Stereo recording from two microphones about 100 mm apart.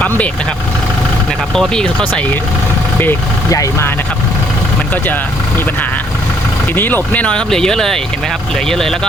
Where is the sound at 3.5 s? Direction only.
35° left (ahead or behind).